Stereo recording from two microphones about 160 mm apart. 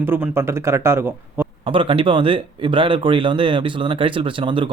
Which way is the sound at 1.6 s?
30° right (ahead or behind).